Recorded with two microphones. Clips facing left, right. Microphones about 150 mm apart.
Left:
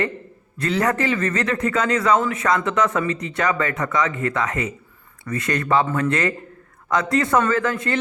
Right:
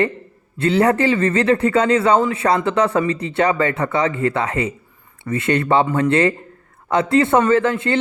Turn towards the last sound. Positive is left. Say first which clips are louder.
# right 5 dB
turn(degrees=-25)  # may be behind; listen again after turning